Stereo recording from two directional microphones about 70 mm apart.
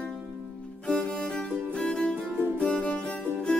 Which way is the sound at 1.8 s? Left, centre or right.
Centre.